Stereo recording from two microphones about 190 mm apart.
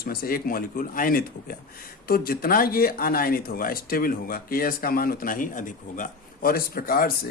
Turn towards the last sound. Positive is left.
turn(degrees=50)  # may be behind; listen again after turning